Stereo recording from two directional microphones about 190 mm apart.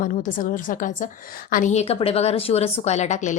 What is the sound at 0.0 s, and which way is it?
A woman's voice, 45° left (ahead or behind).